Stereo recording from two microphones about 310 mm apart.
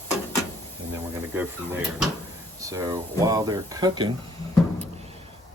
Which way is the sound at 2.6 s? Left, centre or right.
Centre.